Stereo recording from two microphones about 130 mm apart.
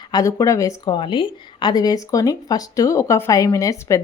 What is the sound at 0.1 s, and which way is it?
Speech, 25° left (ahead or behind).